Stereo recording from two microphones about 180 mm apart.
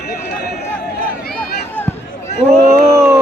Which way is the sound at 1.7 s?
10° left (ahead or behind).